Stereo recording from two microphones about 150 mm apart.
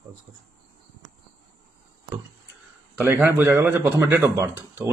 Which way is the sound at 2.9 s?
15° right (ahead or behind).